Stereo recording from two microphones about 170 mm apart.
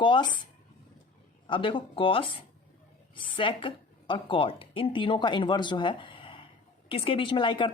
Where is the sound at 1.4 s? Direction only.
30° left (ahead or behind).